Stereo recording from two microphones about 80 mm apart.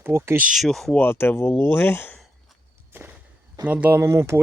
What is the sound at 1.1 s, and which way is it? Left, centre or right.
Speech, left.